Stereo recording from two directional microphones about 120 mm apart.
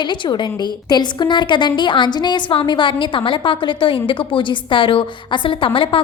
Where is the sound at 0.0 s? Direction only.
40° left (ahead or behind).